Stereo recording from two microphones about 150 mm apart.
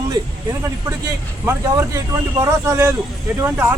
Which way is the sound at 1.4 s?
20° right (ahead or behind).